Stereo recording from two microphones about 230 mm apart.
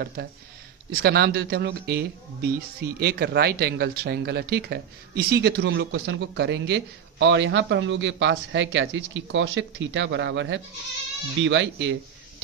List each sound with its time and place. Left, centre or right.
0.0 s speech: right